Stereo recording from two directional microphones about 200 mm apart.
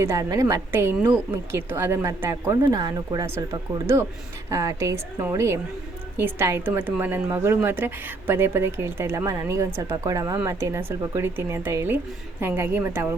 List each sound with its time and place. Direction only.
0.0 s speech: 15° right (ahead or behind)
4.4 s speech: 15° right (ahead or behind)